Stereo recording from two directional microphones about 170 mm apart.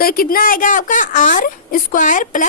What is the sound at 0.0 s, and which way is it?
A woman's voice, 60° left (ahead or behind).